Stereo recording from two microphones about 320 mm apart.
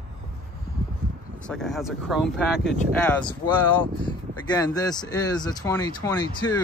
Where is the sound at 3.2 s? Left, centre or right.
Centre.